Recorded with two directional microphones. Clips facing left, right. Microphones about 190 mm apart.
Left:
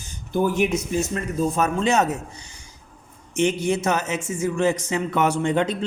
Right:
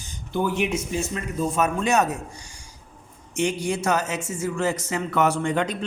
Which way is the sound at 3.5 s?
20° left (ahead or behind).